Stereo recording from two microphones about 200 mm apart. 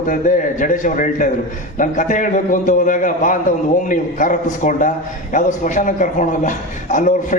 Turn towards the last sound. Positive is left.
turn(degrees=40)  # may be behind; listen again after turning